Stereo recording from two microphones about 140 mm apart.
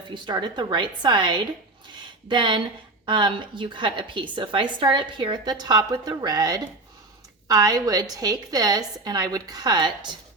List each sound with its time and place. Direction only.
0.1 s a woman's voice: 35° right (ahead or behind)